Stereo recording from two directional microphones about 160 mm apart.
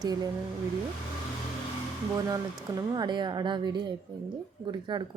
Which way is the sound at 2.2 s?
20° right (ahead or behind).